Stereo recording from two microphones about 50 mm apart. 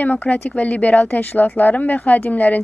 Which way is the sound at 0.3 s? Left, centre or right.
Left.